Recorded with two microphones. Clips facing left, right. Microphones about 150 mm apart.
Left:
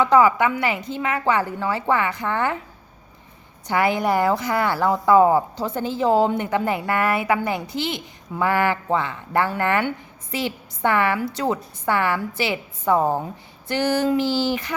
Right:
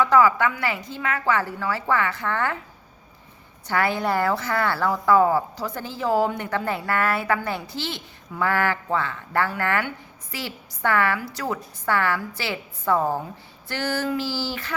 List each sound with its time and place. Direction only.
0.0 s a woman's voice: 20° left (ahead or behind)
3.7 s a woman's voice: 15° left (ahead or behind)